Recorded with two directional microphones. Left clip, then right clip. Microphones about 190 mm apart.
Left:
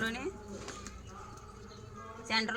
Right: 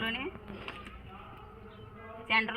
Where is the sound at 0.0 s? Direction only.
20° right (ahead or behind).